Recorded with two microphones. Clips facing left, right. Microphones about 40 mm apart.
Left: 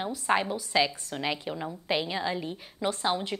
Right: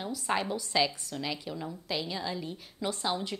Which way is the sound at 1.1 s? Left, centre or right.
Left.